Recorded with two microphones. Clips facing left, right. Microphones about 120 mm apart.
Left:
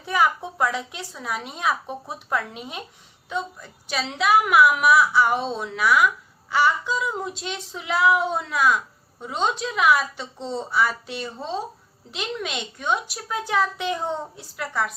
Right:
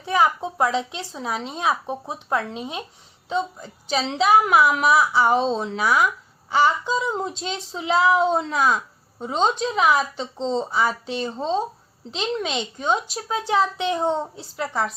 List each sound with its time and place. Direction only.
0.0 s a woman's voice: 25° right (ahead or behind)